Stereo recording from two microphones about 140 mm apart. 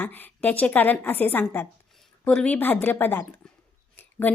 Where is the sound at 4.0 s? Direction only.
15° left (ahead or behind).